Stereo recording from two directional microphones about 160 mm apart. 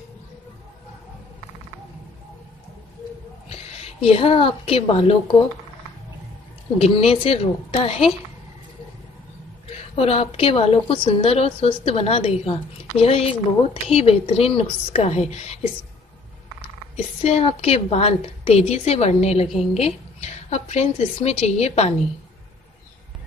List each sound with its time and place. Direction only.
3.4 s a woman's voice: 40° left (ahead or behind)
6.8 s a woman's voice: 40° left (ahead or behind)
9.9 s a woman's voice: 35° left (ahead or behind)
16.9 s a woman's voice: 40° left (ahead or behind)